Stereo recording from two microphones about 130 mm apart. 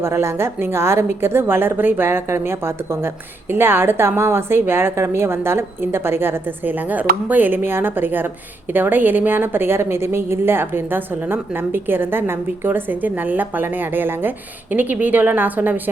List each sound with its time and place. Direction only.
0.0 s a woman's voice: 20° right (ahead or behind)